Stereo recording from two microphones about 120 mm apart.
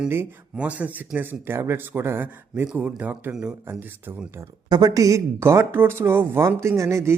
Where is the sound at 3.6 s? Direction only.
15° right (ahead or behind).